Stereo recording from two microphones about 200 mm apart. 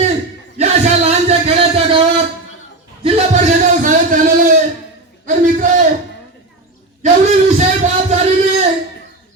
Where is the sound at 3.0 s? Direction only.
40° right (ahead or behind).